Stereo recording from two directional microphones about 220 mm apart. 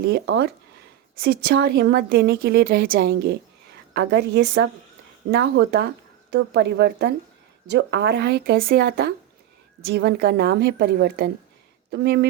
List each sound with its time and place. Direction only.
0.0 s speech: 45° right (ahead or behind)